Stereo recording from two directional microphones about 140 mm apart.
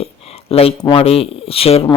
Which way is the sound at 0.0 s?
45° left (ahead or behind).